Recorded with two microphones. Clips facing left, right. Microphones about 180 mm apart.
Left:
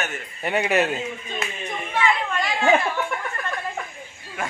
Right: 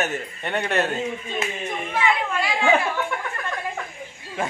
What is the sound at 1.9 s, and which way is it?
Chatter, 10° right (ahead or behind).